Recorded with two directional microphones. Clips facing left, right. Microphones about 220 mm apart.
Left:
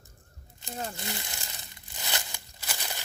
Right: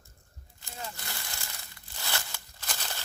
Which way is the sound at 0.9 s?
20° left (ahead or behind).